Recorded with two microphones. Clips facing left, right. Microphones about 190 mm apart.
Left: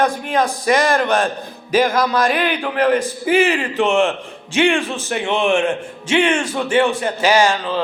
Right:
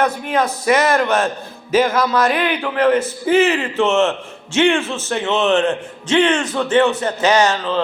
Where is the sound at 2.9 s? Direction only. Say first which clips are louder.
Right 1 dB; 10° left (ahead or behind).